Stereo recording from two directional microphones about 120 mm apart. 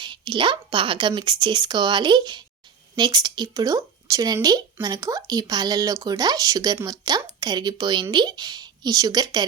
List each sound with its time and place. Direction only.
0.0 s speech: 40° right (ahead or behind)